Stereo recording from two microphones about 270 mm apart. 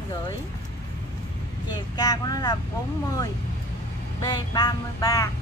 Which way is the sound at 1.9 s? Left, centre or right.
Centre.